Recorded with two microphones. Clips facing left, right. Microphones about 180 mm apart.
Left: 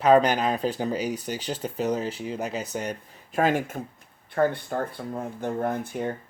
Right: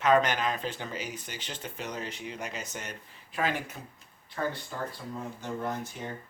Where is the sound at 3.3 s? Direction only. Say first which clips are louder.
Left 8 dB; 50° left (ahead or behind).